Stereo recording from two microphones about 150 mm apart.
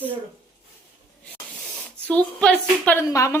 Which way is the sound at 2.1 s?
10° left (ahead or behind).